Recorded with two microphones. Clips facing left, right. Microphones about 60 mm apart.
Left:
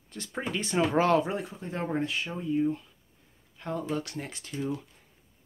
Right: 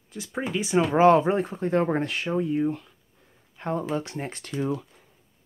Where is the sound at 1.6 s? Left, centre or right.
Right.